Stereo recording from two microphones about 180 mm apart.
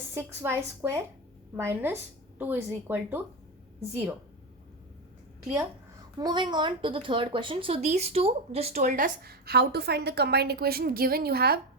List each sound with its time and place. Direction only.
0.1 s a woman's voice: 15° right (ahead or behind)
6.1 s a woman's voice: 25° right (ahead or behind); by 11.6 s 60° right (ahead or behind)